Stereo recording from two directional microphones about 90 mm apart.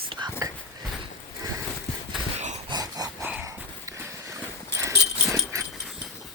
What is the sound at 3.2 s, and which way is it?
Dog, 20° right (ahead or behind).